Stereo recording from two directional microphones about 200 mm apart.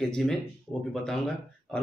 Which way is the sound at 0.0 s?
5° left (ahead or behind).